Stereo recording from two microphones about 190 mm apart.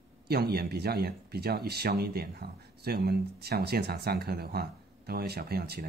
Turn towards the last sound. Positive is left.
turn(degrees=-55)  # may be behind; listen again after turning